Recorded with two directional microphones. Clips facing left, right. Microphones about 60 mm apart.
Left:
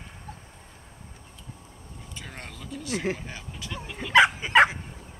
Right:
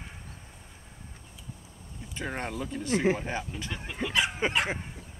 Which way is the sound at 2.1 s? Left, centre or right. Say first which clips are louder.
Right 8 dB; right.